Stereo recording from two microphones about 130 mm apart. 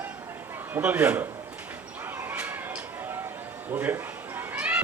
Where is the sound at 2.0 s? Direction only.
15° right (ahead or behind).